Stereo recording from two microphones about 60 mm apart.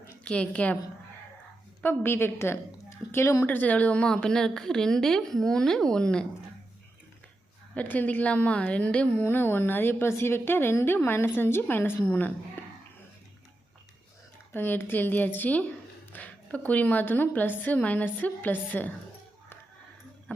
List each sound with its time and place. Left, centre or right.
0.3 s a woman's voice: centre
1.8 s a woman's voice: left
3.4 s a woman's voice: left
7.8 s a woman's voice: left
9.2 s a woman's voice: left
14.5 s a woman's voice: left